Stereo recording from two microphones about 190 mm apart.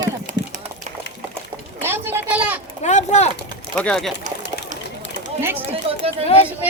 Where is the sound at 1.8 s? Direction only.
10° right (ahead or behind).